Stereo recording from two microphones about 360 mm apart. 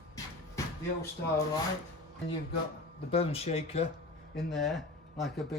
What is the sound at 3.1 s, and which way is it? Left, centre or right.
Speech, centre.